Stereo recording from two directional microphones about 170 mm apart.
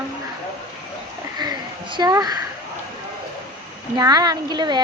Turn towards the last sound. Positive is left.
turn(degrees=-25)  # may be behind; listen again after turning